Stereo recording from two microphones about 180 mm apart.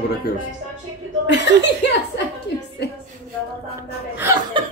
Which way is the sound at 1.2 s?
80° left.